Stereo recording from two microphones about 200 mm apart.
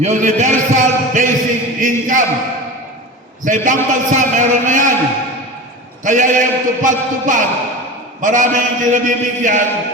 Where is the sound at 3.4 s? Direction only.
40° right (ahead or behind).